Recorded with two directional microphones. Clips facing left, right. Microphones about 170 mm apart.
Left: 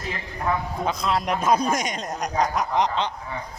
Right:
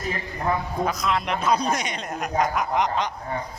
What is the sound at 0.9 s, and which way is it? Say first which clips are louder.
A man's voice: left 3 dB; 30° left (ahead or behind).